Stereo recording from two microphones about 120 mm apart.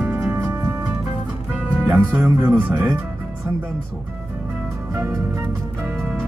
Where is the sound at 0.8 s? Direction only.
10° right (ahead or behind).